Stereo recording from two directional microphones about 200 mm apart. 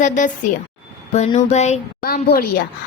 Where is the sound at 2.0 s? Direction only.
50° left (ahead or behind).